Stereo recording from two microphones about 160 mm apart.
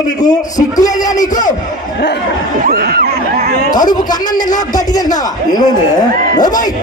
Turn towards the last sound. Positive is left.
turn(degrees=25)  # may be behind; listen again after turning